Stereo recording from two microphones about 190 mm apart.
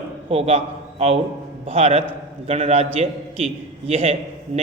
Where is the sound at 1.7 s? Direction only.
30° right (ahead or behind).